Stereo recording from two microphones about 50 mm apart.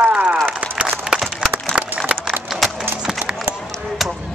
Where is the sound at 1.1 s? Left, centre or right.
Centre.